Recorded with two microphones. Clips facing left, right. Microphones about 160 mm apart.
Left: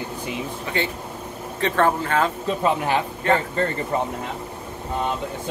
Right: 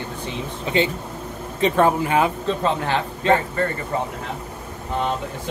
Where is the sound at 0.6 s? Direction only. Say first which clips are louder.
Right 8 dB; 20° right (ahead or behind).